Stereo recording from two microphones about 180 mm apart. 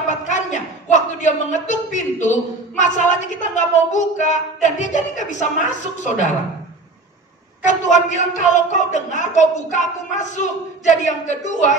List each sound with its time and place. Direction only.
0.1 s a man's voice: 40° left (ahead or behind)
7.6 s speech: 40° left (ahead or behind)